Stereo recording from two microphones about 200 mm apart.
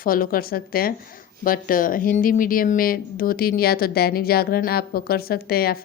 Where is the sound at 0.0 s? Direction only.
45° left (ahead or behind).